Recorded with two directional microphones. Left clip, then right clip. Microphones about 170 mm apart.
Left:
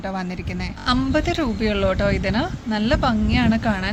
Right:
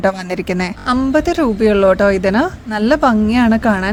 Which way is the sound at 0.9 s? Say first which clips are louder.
Right 5 dB; 50° right (ahead or behind).